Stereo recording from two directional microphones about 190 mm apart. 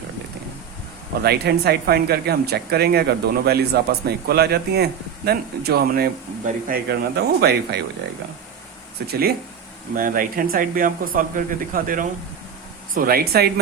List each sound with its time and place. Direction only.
1.2 s speech: 55° right (ahead or behind)
9.0 s speech: 55° right (ahead or behind)